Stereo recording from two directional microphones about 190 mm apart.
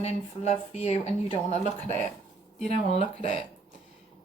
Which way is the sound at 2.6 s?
35° left (ahead or behind).